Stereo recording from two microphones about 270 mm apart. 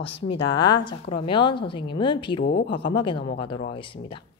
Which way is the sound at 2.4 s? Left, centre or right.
Left.